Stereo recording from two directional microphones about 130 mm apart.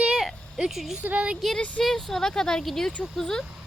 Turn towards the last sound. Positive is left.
turn(degrees=5)  # may be behind; listen again after turning